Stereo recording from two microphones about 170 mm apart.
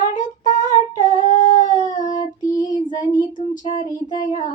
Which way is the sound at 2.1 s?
20° left (ahead or behind).